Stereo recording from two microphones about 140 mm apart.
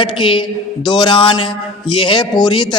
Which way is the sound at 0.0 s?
35° left (ahead or behind).